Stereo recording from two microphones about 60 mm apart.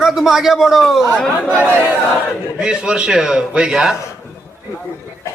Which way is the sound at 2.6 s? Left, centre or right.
Centre.